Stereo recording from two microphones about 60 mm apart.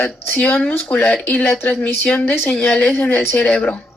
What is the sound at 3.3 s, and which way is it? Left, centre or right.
Speech, centre.